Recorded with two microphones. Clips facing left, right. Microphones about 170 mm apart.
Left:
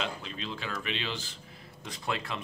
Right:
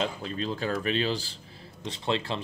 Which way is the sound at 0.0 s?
40° right (ahead or behind).